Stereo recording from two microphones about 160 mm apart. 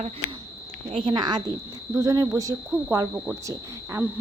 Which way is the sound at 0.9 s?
30° right (ahead or behind).